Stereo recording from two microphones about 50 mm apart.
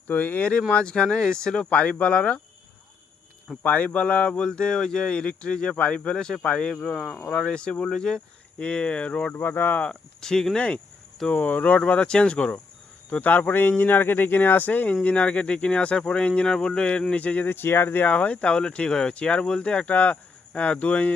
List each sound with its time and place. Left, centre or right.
0.1 s speech: left
0.7 s speech: left
1.7 s speech: left
3.6 s speech: left
6.9 s speech: centre
7.3 s speech: left
9.3 s speech: left
9.8 s speech: centre
11.3 s speech: left
15.0 s speech: left
17.5 s speech: left
17.8 s speech: left